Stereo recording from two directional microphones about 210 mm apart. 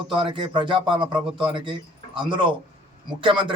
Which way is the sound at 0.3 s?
25° right (ahead or behind).